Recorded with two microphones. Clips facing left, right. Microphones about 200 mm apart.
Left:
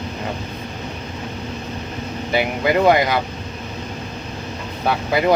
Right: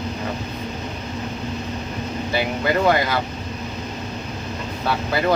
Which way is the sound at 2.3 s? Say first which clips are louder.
Left 3 dB; 20° left (ahead or behind).